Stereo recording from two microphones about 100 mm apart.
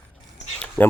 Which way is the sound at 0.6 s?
20° left (ahead or behind).